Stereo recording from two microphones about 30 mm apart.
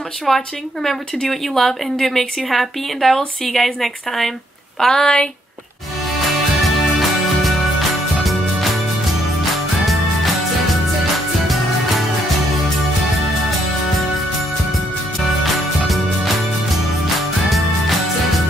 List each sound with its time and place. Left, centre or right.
0.3 s a woman's voice: centre
5.0 s speech: left
6.6 s music: centre
15.4 s music: centre